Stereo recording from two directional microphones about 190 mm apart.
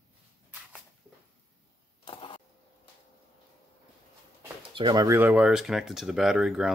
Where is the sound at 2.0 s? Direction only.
25° left (ahead or behind).